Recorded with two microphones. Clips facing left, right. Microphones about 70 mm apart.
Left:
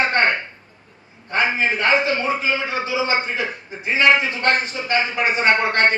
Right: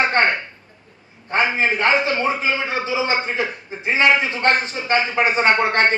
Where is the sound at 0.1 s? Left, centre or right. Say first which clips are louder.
Right 1 dB; right.